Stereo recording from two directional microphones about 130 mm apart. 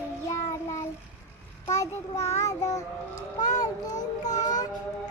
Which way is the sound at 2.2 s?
60° left (ahead or behind).